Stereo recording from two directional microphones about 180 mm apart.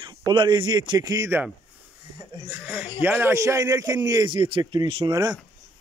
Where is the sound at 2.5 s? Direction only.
10° right (ahead or behind).